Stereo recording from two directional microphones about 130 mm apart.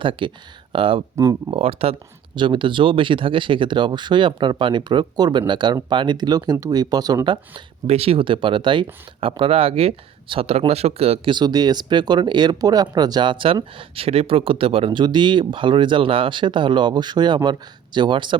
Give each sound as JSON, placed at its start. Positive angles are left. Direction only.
{"t": 0.0, "sound": "speech", "side_deg": -40}
{"t": 1.1, "sound": "speech", "side_deg": -25}
{"t": 1.5, "sound": "speech", "side_deg": -50}
{"t": 7.9, "sound": "speech", "side_deg": -50}
{"t": 11.3, "sound": "speech", "side_deg": -30}